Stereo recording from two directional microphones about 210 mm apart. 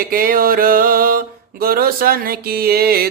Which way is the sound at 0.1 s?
45° right (ahead or behind).